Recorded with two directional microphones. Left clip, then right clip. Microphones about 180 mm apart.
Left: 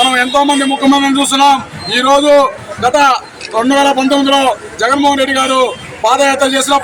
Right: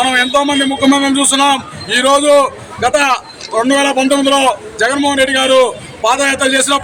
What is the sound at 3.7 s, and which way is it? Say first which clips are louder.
Speech: left 2 dB; 30° right (ahead or behind).